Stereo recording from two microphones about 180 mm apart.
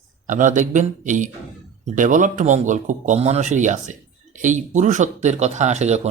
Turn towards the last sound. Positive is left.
turn(degrees=-40)  # may be behind; listen again after turning